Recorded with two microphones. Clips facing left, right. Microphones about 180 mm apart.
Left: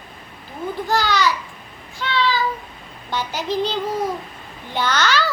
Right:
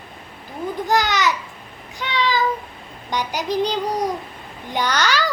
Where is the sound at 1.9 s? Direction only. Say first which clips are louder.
Even; 15° right (ahead or behind).